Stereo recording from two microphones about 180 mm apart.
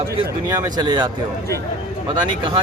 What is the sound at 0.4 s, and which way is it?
Speech, 20° right (ahead or behind).